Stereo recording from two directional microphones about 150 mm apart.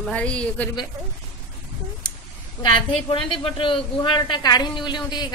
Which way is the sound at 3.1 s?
35° left (ahead or behind).